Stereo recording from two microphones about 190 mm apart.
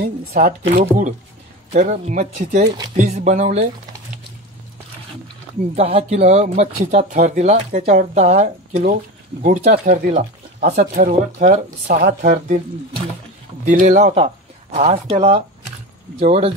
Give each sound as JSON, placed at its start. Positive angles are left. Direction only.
{"t": 0.0, "sound": "speech", "side_deg": -50}
{"t": 5.8, "sound": "speech", "side_deg": -35}
{"t": 13.7, "sound": "speech", "side_deg": -40}